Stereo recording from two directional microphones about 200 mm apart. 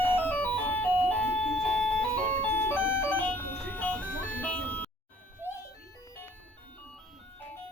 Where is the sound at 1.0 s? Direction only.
10° left (ahead or behind).